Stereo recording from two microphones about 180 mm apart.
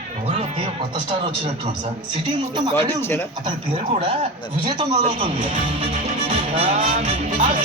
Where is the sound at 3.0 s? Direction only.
10° left (ahead or behind).